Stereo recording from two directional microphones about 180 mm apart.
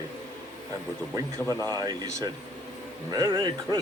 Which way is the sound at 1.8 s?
20° right (ahead or behind).